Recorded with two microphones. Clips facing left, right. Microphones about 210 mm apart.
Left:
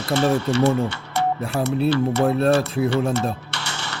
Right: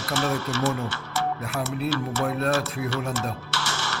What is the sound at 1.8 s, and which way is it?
Speech, 25° left (ahead or behind).